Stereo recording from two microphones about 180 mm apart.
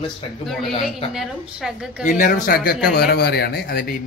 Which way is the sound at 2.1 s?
50° left (ahead or behind).